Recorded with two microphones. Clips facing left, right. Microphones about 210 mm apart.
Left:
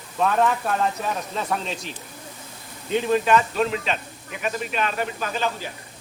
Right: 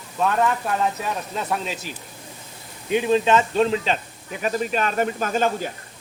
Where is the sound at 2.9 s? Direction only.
15° right (ahead or behind).